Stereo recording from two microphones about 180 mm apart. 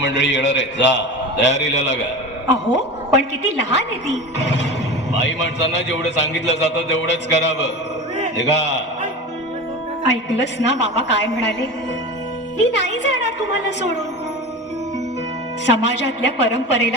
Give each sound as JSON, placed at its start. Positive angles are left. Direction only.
{"t": 0.0, "sound": "a man's voice", "side_deg": 75}
{"t": 10.1, "sound": "a man's voice", "side_deg": 75}
{"t": 15.6, "sound": "a man's voice", "side_deg": 75}